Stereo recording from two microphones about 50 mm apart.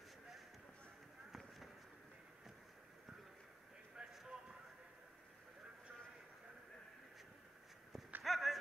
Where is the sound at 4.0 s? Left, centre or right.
Centre.